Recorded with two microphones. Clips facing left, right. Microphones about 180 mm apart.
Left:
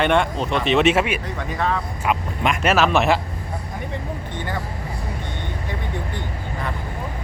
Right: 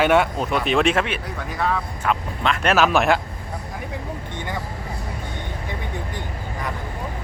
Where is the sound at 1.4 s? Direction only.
5° right (ahead or behind).